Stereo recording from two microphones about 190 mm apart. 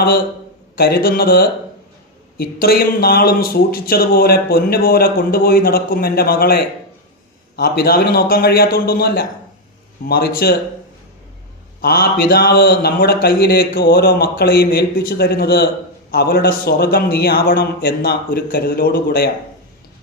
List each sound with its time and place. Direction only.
0.8 s speech: 55° left (ahead or behind)
11.8 s a man's voice: 50° left (ahead or behind)